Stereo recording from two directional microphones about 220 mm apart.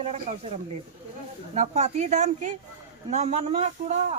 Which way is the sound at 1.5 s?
30° right (ahead or behind).